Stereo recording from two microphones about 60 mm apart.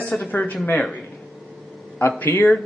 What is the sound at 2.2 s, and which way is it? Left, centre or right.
Speech, left.